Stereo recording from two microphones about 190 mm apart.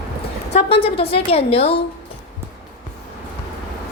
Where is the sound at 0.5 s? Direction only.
30° left (ahead or behind).